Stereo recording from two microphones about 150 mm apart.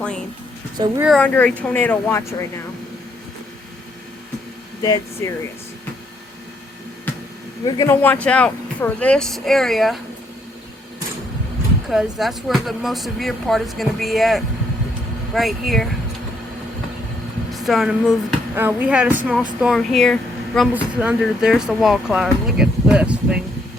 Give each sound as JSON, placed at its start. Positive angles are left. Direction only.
{"t": 0.8, "sound": "speech", "side_deg": -30}
{"t": 1.2, "sound": "speech", "side_deg": 10}
{"t": 4.8, "sound": "speech", "side_deg": 25}
{"t": 7.6, "sound": "speech", "side_deg": 25}
{"t": 8.0, "sound": "speech", "side_deg": 10}
{"t": 11.9, "sound": "speech", "side_deg": 0}
{"t": 17.5, "sound": "speech", "side_deg": 0}
{"t": 20.7, "sound": "speech", "side_deg": -10}